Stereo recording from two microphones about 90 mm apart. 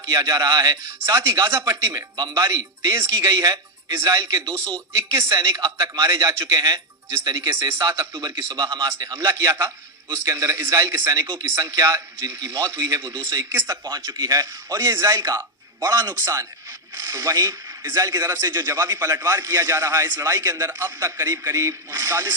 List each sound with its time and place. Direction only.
0.0 s speech: 45° right (ahead or behind)
2.9 s speech: 35° right (ahead or behind)
8.5 s a man's voice: 55° right (ahead or behind)
9.0 s speech: 40° right (ahead or behind)
13.8 s speech: 45° right (ahead or behind)